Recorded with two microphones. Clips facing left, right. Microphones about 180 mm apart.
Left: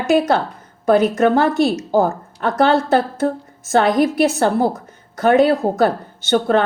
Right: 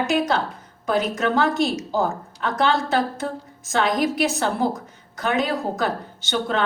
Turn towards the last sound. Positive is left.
turn(degrees=50)  # may be behind; listen again after turning